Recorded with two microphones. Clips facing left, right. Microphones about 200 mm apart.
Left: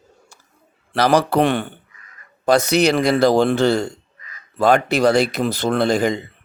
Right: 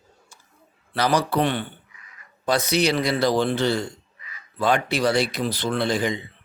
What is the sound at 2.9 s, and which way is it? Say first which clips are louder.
Speech: left 7 dB; 50° left (ahead or behind).